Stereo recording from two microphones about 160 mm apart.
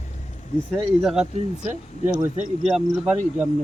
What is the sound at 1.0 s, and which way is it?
A man's voice, 5° right (ahead or behind).